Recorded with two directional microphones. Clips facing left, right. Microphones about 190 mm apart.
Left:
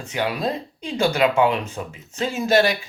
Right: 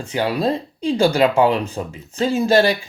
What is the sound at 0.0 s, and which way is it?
Speech, 30° right (ahead or behind).